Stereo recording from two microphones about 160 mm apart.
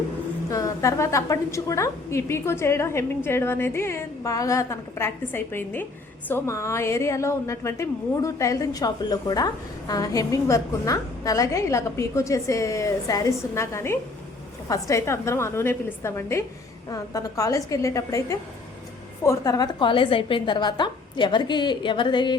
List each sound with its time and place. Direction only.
0.5 s a woman's voice: 20° left (ahead or behind)